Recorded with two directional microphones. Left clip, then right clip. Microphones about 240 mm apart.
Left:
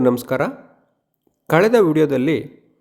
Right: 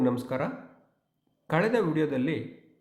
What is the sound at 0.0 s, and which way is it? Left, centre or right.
A man's voice, left.